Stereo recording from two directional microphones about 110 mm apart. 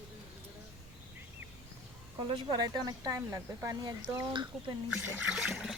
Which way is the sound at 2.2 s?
40° right (ahead or behind).